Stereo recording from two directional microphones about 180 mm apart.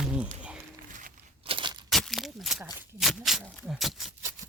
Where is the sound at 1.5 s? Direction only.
30° right (ahead or behind).